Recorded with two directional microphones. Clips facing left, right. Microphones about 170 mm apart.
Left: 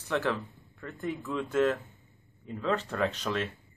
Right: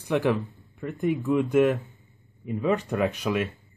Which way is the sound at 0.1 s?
15° right (ahead or behind).